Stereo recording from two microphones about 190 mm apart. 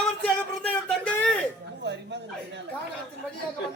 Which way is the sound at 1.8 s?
65° right (ahead or behind).